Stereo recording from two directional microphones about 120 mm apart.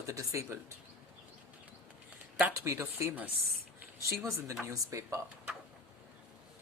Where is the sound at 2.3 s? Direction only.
15° right (ahead or behind).